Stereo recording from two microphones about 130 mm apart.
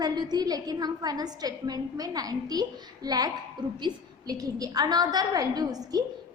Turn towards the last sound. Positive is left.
turn(degrees=-30)  # may be behind; listen again after turning